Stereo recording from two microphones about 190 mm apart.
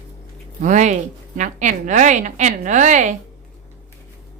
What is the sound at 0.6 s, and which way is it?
Speech, 40° right (ahead or behind).